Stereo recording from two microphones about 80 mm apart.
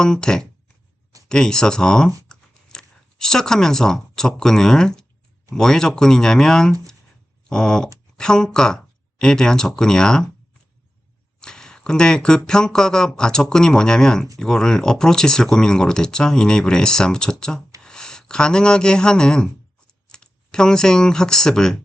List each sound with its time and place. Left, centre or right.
0.0 s speech: centre
11.3 s speech: centre